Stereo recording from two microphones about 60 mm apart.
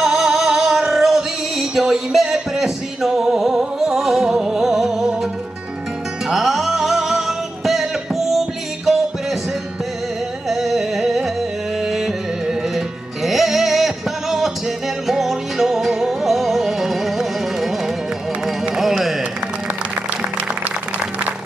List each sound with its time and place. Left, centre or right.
0.0 s music: centre
6.2 s music: centre
10.5 s music: centre
12.4 s music: centre
18.8 s a sound: centre